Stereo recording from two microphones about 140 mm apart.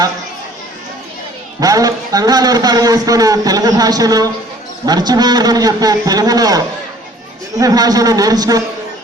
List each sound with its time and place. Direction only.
1.6 s a man's voice: 25° right (ahead or behind)
7.6 s a man's voice: 25° right (ahead or behind)